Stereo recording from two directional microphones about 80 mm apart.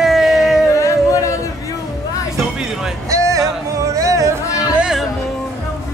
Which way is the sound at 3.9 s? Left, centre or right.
Right.